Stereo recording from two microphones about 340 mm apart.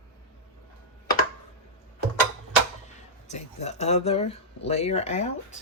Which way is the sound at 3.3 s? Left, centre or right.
Centre.